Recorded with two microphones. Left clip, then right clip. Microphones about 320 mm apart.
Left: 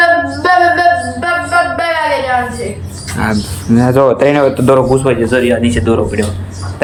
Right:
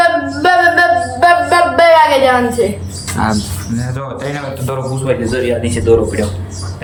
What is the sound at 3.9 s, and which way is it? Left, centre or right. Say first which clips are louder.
Speech: left 16 dB; centre.